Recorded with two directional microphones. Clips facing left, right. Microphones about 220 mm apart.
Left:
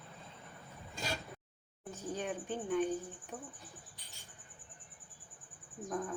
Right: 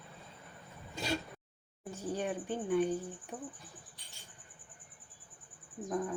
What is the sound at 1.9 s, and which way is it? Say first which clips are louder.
Speech: right 3 dB; 10° right (ahead or behind).